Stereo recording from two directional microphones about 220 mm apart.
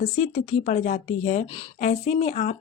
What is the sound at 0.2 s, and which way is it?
A woman's voice, 35° left (ahead or behind).